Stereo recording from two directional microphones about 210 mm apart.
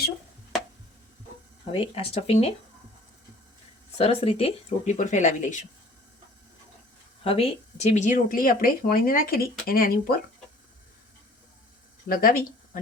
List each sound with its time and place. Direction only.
1.6 s speech: 25° left (ahead or behind)
3.9 s speech: 25° left (ahead or behind)
7.3 s speech: 25° left (ahead or behind); by 10.2 s 45° left (ahead or behind)
12.0 s speech: 45° left (ahead or behind)